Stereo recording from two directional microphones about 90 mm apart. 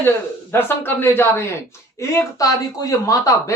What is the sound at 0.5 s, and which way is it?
Speech, 25° left (ahead or behind).